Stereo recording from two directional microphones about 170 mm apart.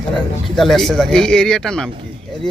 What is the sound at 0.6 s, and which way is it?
Speech, centre (ahead or behind).